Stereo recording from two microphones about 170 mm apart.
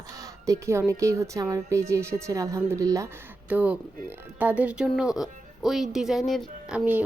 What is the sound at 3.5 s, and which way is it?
Speech, 10° right (ahead or behind).